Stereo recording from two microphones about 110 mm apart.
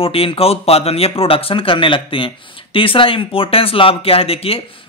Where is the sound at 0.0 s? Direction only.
60° left (ahead or behind).